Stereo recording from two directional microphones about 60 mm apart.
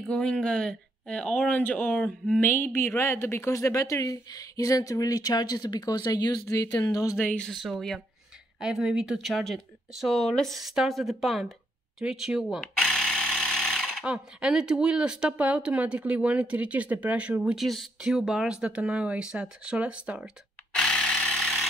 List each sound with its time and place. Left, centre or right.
0.1 s speech: centre
1.5 s a woman's voice: left
7.5 s speech: centre
8.5 s speech: centre
9.2 s speech: centre
12.0 s speech: centre
12.5 s jackhammer: centre
14.0 s speech: centre
17.4 s speech: centre
20.7 s a sound: centre
21.4 s vehicle: centre